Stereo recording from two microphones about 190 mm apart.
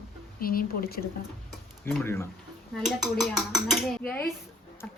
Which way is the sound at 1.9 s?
10° left (ahead or behind).